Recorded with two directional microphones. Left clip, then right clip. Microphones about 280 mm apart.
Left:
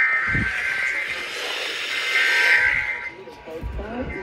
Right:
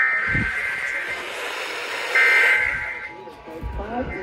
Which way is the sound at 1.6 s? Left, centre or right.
Right.